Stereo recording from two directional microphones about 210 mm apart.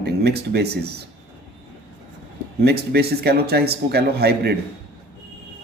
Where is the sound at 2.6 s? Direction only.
50° right (ahead or behind).